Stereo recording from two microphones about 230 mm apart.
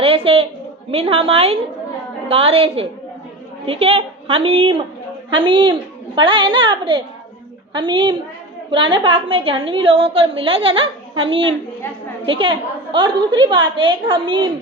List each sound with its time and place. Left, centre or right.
0.0 s a woman's voice: right